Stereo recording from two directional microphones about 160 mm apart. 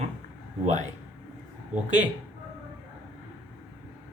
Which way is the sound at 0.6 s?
50° right (ahead or behind).